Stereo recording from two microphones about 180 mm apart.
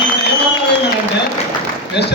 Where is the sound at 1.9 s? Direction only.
70° left (ahead or behind).